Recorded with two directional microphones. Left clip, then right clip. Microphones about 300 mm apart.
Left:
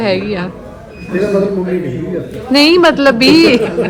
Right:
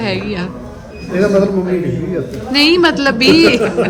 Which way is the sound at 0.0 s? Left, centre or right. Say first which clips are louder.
Left 4 dB; centre.